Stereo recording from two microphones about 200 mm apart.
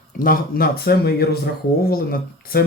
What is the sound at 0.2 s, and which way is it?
Speech, 45° left (ahead or behind).